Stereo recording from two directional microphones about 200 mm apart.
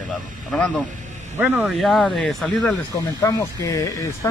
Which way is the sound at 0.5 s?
5° left (ahead or behind).